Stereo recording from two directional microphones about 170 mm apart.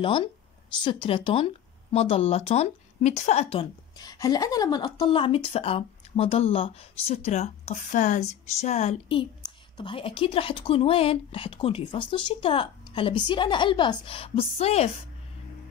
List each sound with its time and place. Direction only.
0.0 s speech: 30° left (ahead or behind)
4.0 s speech: 25° left (ahead or behind); by 9.2 s 40° left (ahead or behind)
9.4 s speech: 25° left (ahead or behind)